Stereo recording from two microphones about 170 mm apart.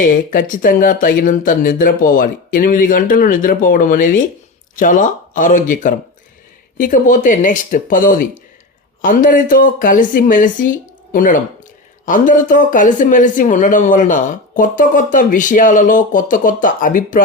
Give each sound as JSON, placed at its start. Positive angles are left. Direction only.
{"t": 0.0, "sound": "speech", "side_deg": 50}